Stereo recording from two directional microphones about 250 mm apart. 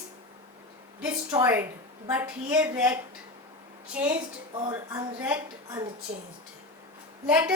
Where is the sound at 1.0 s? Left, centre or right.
Centre.